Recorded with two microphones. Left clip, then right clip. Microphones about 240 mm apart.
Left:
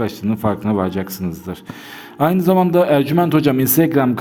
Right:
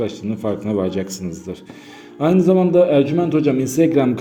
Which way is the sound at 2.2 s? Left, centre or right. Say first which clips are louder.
Even; left.